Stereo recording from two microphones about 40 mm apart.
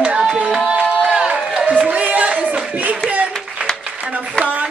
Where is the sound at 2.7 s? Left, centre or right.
Right.